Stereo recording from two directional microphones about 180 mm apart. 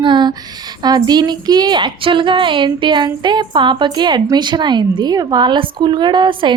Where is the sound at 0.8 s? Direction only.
20° right (ahead or behind).